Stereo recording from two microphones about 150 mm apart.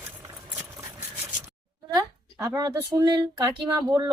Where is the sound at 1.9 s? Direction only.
20° right (ahead or behind).